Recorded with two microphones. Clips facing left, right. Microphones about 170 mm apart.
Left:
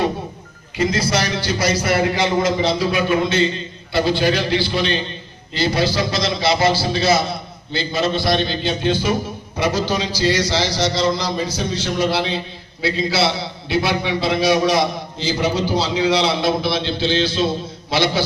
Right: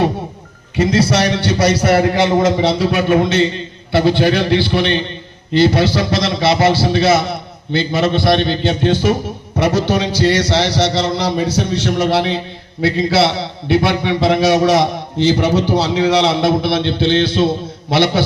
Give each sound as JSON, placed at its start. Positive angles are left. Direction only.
{"t": 0.9, "sound": "a man's voice", "side_deg": -70}
{"t": 2.0, "sound": "speech", "side_deg": -50}